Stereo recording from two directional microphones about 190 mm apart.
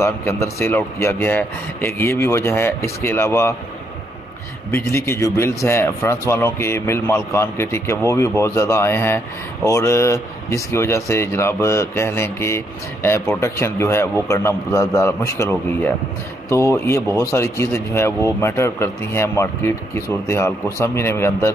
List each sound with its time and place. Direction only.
0.0 s speech: 15° left (ahead or behind)
4.6 s speech: 15° left (ahead or behind)